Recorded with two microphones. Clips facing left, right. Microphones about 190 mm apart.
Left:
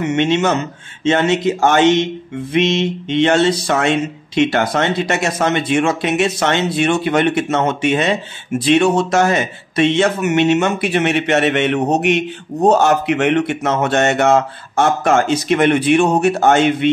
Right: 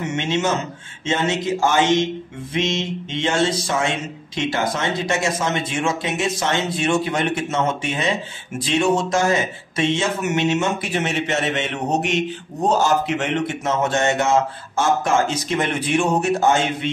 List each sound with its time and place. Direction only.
0.0 s speech: 65° left (ahead or behind)